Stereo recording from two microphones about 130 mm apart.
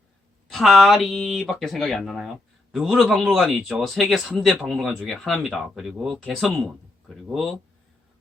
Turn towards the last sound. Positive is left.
turn(degrees=0)  # may be behind; listen again after turning